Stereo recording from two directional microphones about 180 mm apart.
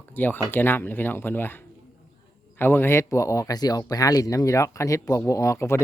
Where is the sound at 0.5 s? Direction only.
10° left (ahead or behind).